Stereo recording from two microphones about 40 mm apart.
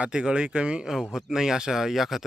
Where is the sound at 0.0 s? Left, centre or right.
Right.